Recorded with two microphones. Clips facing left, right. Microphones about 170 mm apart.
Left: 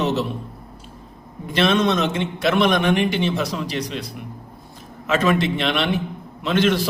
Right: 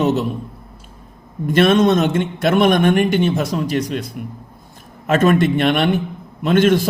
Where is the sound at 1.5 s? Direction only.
50° right (ahead or behind).